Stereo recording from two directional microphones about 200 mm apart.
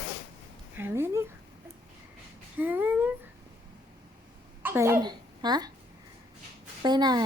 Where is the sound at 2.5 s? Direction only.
10° right (ahead or behind).